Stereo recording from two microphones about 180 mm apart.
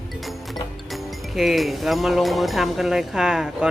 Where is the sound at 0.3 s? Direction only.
Centre (ahead or behind).